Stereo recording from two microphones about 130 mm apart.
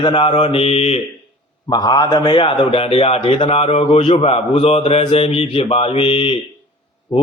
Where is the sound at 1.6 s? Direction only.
30° left (ahead or behind).